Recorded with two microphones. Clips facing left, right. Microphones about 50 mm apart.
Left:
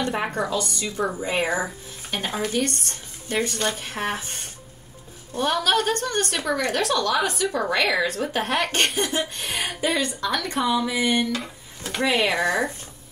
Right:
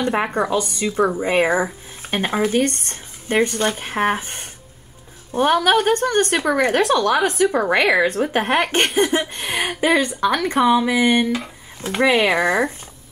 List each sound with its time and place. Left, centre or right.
0.1 s speech: right
3.4 s speech: centre
3.7 s speech: right